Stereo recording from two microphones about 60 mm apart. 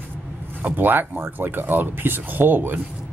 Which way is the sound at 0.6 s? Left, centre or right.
Right.